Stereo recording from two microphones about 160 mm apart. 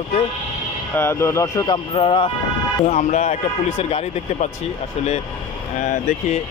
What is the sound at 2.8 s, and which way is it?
Speech, 45° left (ahead or behind).